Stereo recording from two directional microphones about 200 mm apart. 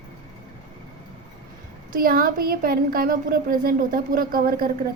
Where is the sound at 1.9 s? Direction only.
45° right (ahead or behind).